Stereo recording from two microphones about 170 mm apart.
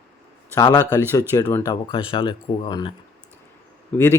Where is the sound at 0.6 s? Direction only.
20° left (ahead or behind).